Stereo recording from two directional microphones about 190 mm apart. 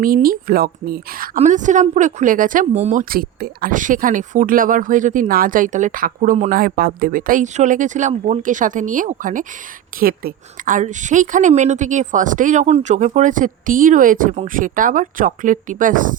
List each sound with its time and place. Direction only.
0.0 s a woman's voice: 50° right (ahead or behind)
1.4 s a woman's voice: 40° right (ahead or behind)
6.6 s a woman's voice: 50° right (ahead or behind)